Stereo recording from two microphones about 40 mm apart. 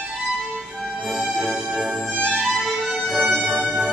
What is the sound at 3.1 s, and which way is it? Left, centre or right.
Music, centre.